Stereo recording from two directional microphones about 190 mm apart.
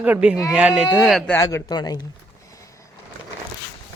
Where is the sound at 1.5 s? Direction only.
20° left (ahead or behind).